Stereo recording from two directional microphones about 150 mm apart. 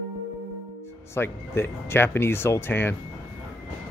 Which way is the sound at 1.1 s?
15° left (ahead or behind).